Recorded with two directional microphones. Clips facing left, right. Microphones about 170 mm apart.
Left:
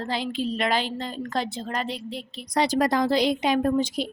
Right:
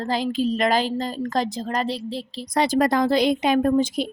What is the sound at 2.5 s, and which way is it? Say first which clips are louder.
A woman's voice: right 2 dB; 50° right (ahead or behind).